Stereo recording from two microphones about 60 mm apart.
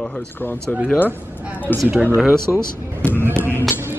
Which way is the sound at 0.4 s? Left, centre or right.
Left.